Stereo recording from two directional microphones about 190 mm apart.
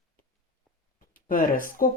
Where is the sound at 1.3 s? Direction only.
45° left (ahead or behind).